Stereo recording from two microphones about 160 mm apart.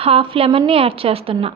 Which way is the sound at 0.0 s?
35° right (ahead or behind).